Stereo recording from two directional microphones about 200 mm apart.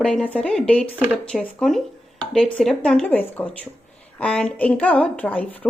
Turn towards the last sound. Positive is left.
turn(degrees=10)  # may be behind; listen again after turning